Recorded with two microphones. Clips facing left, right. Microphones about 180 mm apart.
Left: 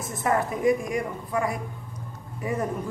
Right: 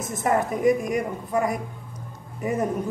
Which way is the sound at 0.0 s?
20° right (ahead or behind).